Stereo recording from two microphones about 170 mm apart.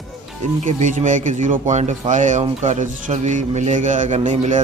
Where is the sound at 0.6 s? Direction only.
45° right (ahead or behind).